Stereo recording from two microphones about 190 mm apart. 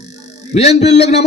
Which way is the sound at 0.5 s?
35° left (ahead or behind).